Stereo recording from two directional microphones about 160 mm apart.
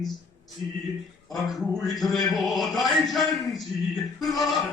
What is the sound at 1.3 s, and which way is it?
A man's voice, centre (ahead or behind).